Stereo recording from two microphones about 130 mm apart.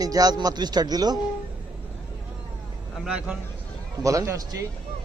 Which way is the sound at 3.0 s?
5° right (ahead or behind).